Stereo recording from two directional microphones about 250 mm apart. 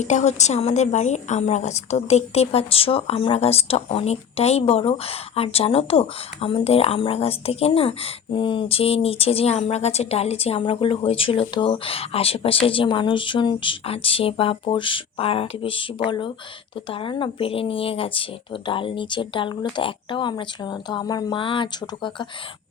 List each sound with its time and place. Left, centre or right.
0.0 s a woman's voice: left